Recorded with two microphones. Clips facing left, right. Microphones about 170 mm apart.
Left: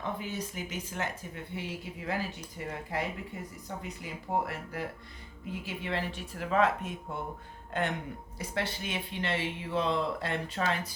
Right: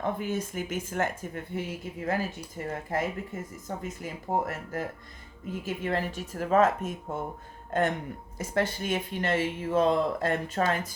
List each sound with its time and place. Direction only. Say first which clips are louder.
0.0 s speech: right 6 dB; 50° right (ahead or behind)